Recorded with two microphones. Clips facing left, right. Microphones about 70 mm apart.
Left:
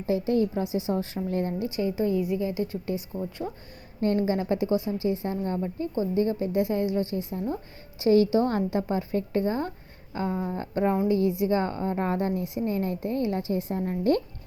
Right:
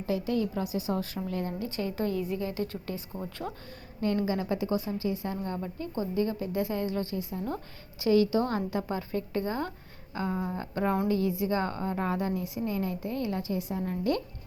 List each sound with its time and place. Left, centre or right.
0.0 s a woman's voice: left
1.5 s a woman's voice: centre
4.0 s a woman's voice: left
10.3 s speech: centre
10.6 s a woman's voice: left